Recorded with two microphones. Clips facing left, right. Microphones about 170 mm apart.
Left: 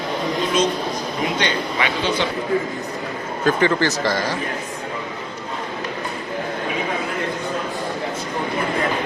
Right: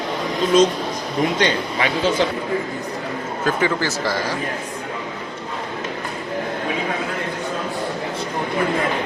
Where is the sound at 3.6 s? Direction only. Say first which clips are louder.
Left 2 dB; 10° right (ahead or behind).